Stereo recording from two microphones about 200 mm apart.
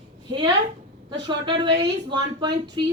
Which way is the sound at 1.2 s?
20° right (ahead or behind).